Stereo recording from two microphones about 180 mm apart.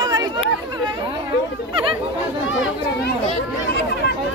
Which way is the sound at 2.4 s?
90° left.